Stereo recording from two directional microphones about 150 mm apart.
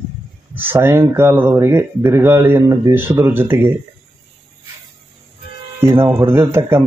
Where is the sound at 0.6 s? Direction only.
15° right (ahead or behind).